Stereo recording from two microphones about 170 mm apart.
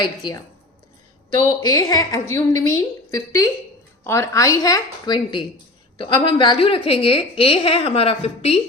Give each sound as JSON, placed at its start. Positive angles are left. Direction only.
{"t": 0.0, "sound": "a woman's voice", "side_deg": 25}